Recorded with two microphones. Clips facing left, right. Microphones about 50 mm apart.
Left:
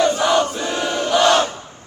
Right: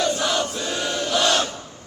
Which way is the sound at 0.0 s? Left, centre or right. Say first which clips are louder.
Left 6 dB; left.